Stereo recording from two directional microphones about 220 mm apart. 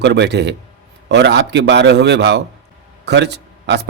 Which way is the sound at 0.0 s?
50° right (ahead or behind).